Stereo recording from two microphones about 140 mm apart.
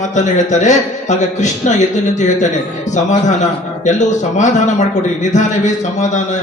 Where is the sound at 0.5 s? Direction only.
60° left (ahead or behind).